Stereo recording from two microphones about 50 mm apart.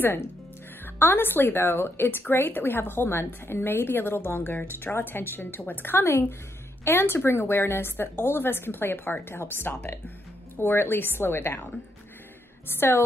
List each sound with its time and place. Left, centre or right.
0.8 s a woman's voice: left
12.6 s a woman's voice: left